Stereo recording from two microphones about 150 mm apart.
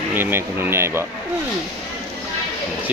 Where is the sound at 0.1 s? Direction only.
15° right (ahead or behind).